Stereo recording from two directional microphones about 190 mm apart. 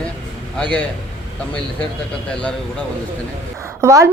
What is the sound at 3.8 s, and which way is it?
Speech, 15° right (ahead or behind).